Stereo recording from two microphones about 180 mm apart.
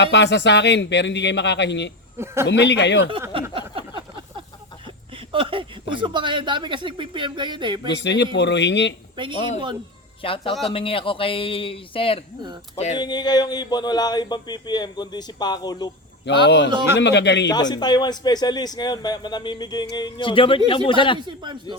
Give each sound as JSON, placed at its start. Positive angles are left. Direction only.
{"t": 0.0, "sound": "a man's voice", "side_deg": 75}
{"t": 2.1, "sound": "a man's voice", "side_deg": -15}
{"t": 2.5, "sound": "a man's voice", "side_deg": 75}
{"t": 3.5, "sound": "a sound", "side_deg": -30}
{"t": 5.3, "sound": "speech", "side_deg": -30}
{"t": 7.9, "sound": "a man's voice", "side_deg": 75}
{"t": 10.2, "sound": "speech", "side_deg": 30}
{"t": 16.3, "sound": "a man's voice", "side_deg": 80}
{"t": 17.5, "sound": "speech", "side_deg": 25}
{"t": 21.2, "sound": "speech", "side_deg": -25}